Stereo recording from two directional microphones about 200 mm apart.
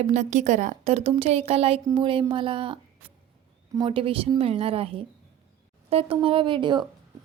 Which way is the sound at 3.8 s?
25° right (ahead or behind).